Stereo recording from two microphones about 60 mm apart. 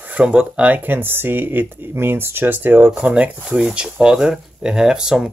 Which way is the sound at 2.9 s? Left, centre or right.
Centre.